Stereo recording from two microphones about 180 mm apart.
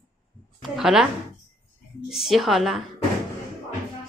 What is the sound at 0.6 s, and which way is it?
Speech, centre (ahead or behind).